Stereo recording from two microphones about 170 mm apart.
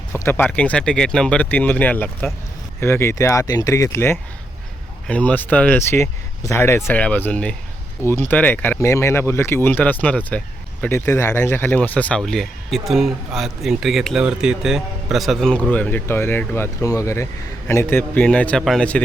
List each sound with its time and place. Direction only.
0.1 s speech: 15° left (ahead or behind)